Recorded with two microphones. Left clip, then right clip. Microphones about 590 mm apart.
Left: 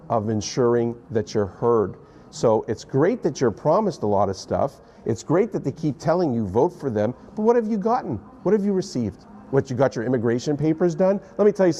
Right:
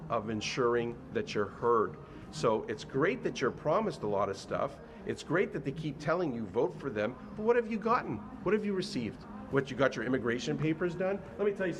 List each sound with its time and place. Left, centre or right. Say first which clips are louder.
0.1 s a man's voice: left 10 dB; left